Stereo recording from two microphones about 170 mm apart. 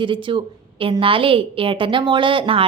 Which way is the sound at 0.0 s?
30° right (ahead or behind).